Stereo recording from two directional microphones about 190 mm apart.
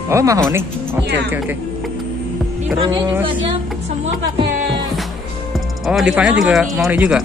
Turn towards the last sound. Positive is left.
turn(degrees=-5)  # may be behind; listen again after turning